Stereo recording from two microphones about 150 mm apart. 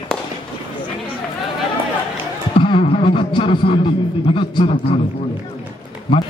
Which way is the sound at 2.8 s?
40° left (ahead or behind).